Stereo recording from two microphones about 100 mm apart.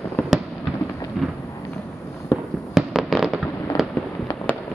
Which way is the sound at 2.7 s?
5° right (ahead or behind).